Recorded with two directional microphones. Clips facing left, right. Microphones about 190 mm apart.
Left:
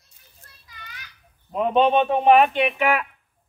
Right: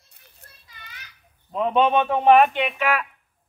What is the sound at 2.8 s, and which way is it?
Speech, 15° left (ahead or behind).